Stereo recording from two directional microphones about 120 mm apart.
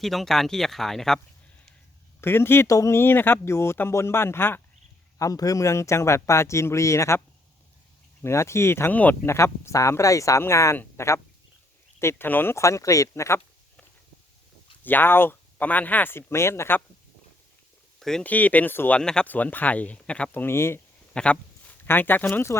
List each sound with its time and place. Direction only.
0.0 s speech: centre (ahead or behind)
2.2 s speech: 20° left (ahead or behind)
5.2 s speech: 30° left (ahead or behind)
8.2 s speech: 25° left (ahead or behind)
14.8 s speech: 15° left (ahead or behind)
18.0 s speech: 10° left (ahead or behind)
21.1 s speech: 10° left (ahead or behind)